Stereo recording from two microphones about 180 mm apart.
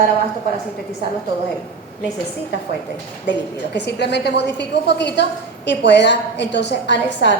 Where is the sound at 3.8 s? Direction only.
70° left (ahead or behind).